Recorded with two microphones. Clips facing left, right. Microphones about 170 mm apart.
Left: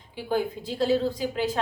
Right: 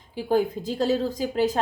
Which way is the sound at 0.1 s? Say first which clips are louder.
Right 4 dB; 40° right (ahead or behind).